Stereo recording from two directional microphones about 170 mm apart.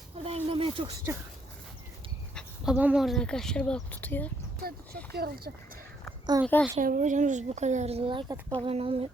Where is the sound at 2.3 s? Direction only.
5° right (ahead or behind); by 4.3 s 10° left (ahead or behind).